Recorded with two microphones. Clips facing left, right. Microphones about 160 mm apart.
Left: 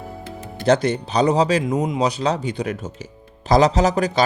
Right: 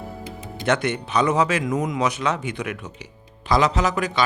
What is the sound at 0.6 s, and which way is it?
Speech, 35° left (ahead or behind).